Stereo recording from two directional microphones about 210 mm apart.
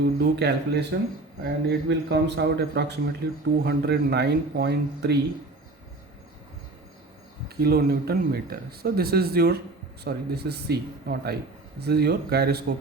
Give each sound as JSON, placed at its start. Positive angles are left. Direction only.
{"t": 0.0, "sound": "speech", "side_deg": -55}
{"t": 7.4, "sound": "speech", "side_deg": -50}